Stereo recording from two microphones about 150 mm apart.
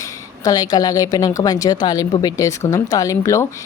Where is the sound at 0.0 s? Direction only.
25° left (ahead or behind).